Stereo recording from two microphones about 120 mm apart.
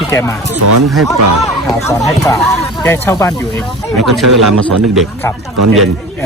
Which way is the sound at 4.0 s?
Centre (ahead or behind).